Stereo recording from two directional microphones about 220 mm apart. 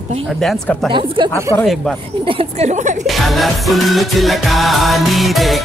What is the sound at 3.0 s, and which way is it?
Music, centre (ahead or behind).